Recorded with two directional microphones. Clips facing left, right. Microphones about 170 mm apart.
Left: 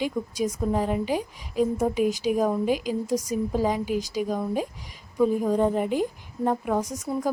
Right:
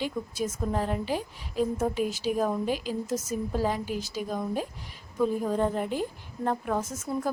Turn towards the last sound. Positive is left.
turn(degrees=15)  # may be behind; listen again after turning